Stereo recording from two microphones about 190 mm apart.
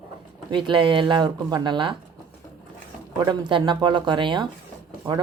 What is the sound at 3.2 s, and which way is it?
Speech, 25° right (ahead or behind).